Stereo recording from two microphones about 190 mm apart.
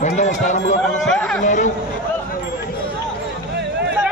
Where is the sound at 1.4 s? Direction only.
40° left (ahead or behind).